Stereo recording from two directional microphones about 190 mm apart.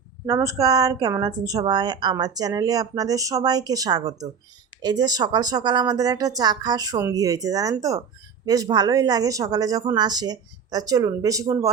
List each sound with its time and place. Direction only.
0.3 s a woman's voice: 15° right (ahead or behind)